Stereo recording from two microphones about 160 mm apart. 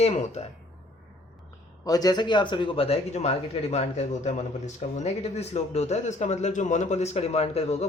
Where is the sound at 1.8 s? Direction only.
25° left (ahead or behind).